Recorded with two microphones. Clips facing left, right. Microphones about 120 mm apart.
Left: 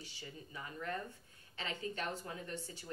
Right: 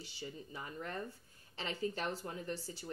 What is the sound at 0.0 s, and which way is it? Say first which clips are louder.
Speech: right 4 dB; 30° right (ahead or behind).